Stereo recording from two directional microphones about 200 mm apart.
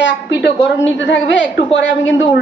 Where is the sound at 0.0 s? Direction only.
60° left (ahead or behind).